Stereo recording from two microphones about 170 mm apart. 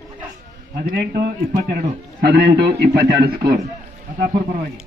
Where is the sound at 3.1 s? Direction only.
65° right (ahead or behind).